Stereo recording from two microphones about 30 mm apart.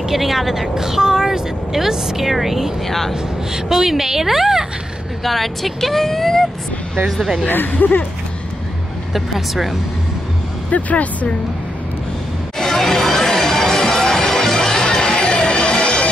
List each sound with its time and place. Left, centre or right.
0.1 s speech: centre
3.7 s speech: centre
5.2 s speech: centre
7.4 s speech: left
9.1 s speech: centre
10.7 s speech: left
12.5 s music: centre; by 16.1 s left